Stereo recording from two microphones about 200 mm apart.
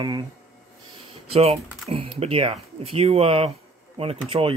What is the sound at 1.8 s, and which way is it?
Speech, 30° right (ahead or behind).